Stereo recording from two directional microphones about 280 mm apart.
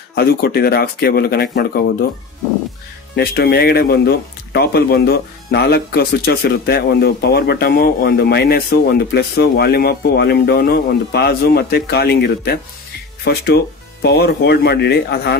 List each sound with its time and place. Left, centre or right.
0.1 s speech: left
3.2 s speech: left